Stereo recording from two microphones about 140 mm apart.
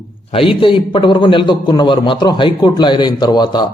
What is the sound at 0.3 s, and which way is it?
A man's voice, 40° left (ahead or behind).